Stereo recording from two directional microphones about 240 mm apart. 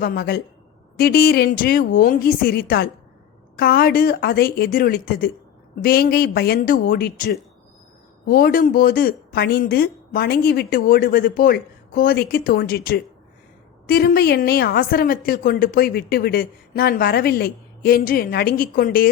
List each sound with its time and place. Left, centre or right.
0.0 s a woman's voice: left